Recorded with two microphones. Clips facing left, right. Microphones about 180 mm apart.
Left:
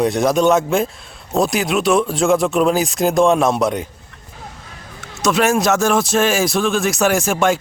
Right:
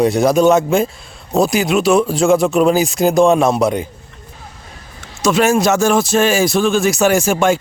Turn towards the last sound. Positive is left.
turn(degrees=0)  # may be behind; listen again after turning